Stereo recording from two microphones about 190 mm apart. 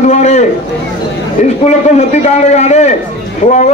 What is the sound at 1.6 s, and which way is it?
A man's voice, 35° left (ahead or behind).